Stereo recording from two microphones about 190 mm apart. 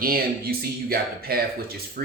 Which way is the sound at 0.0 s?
50° right (ahead or behind).